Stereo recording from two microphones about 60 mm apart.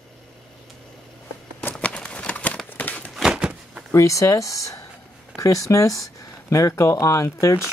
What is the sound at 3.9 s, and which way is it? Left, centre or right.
Speech, left.